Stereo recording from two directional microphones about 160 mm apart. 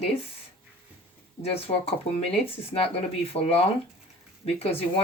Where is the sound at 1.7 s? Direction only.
40° left (ahead or behind).